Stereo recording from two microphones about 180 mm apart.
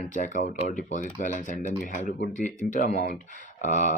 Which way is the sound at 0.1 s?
45° left (ahead or behind).